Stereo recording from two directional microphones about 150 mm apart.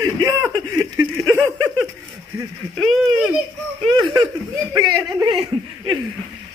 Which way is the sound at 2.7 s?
Centre (ahead or behind).